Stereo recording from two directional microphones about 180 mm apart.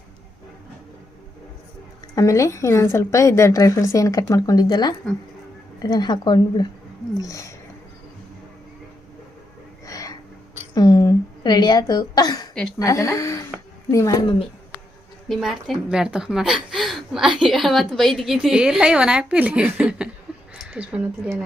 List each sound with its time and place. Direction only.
2.1 s a woman's voice: 15° left (ahead or behind)
9.8 s a sound: 20° left (ahead or behind)
10.8 s cough: 20° left (ahead or behind)
12.8 s a woman's voice: 20° left (ahead or behind)
15.3 s a woman's voice: centre (ahead or behind)